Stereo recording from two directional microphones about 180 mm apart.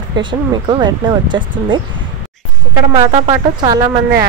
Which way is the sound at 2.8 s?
25° right (ahead or behind).